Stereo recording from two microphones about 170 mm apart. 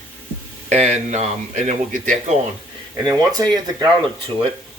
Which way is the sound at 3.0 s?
20° right (ahead or behind).